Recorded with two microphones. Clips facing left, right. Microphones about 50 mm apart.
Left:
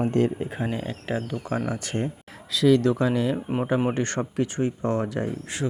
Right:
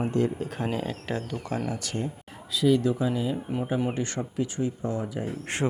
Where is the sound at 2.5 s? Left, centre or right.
Left.